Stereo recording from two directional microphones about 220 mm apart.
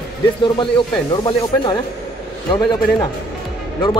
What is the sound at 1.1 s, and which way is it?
Speech, 20° left (ahead or behind).